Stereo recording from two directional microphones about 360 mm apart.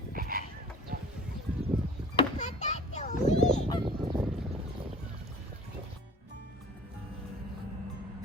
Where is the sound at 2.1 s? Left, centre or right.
Centre.